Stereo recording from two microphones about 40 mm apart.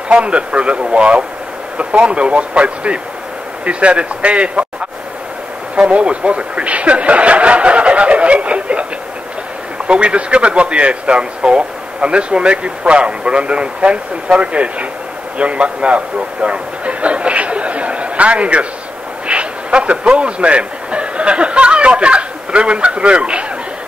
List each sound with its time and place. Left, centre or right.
0.1 s speech: right
5.8 s speech: right
9.8 s speech: right
16.3 s a sound: right
19.2 s speech: right